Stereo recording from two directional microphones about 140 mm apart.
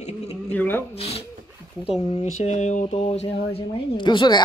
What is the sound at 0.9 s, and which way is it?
Speech, 45° left (ahead or behind).